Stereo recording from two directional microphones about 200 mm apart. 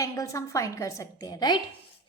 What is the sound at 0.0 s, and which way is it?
A woman's voice, 15° left (ahead or behind).